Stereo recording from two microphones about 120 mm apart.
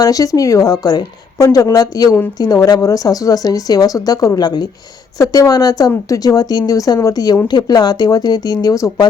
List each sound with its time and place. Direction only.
0.0 s a woman's voice: 30° left (ahead or behind)